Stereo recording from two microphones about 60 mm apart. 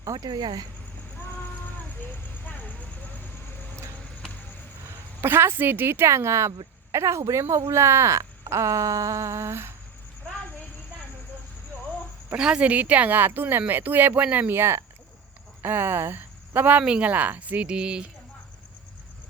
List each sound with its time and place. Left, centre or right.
0.0 s speech: right
2.0 s vehicle: left
4.9 s speech: right
12.3 s speech: centre